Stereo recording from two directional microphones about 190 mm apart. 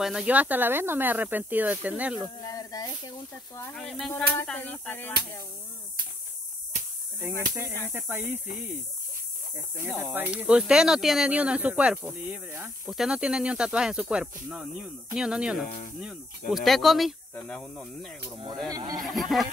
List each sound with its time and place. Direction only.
0.0 s speech: 5° right (ahead or behind)
2.5 s snake: 20° left (ahead or behind)
3.7 s a sound: 5° left (ahead or behind)
7.9 s speech: 10° right (ahead or behind)
9.9 s speech: 10° right (ahead or behind)
18.7 s speech: 20° right (ahead or behind)
19.1 s speech: centre (ahead or behind)